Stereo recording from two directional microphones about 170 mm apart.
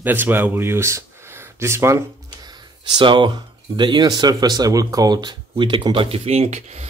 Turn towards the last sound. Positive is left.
turn(degrees=-40)  # may be behind; listen again after turning